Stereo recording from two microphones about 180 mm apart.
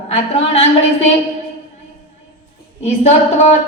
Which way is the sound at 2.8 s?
40° left (ahead or behind).